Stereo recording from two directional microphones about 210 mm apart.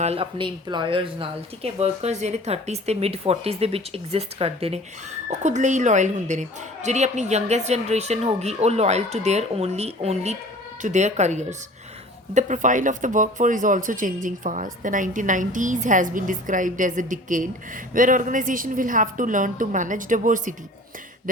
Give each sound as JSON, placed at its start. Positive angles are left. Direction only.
{"t": 0.0, "sound": "speech", "side_deg": -30}